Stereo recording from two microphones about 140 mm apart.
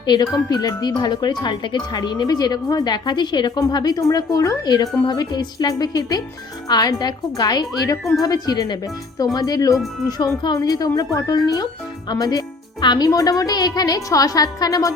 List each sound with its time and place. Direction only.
0.0 s speech: 30° left (ahead or behind)